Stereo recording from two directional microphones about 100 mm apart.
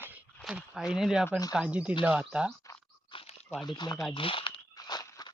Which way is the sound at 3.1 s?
70° left (ahead or behind).